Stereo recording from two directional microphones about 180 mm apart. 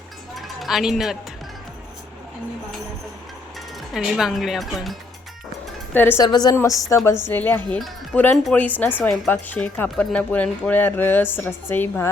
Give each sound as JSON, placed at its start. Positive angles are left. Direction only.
{"t": 0.3, "sound": "a sound", "side_deg": 0}
{"t": 3.9, "sound": "speech", "side_deg": 0}
{"t": 5.9, "sound": "speech", "side_deg": 10}
{"t": 6.2, "sound": "a woman's voice", "side_deg": 20}